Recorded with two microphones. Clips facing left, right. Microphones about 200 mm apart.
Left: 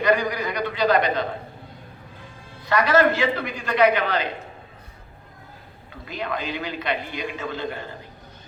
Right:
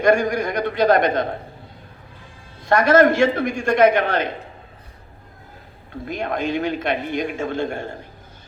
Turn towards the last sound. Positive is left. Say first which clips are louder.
# right 5 dB
turn(degrees=-45)  # may be behind; listen again after turning